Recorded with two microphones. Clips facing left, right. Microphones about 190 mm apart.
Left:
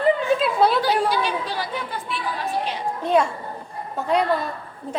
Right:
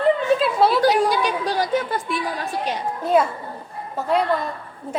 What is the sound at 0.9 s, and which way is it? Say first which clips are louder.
Chatter: right 3 dB; 45° right (ahead or behind).